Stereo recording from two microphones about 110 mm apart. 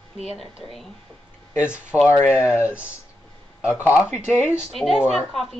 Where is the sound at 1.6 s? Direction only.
10° right (ahead or behind).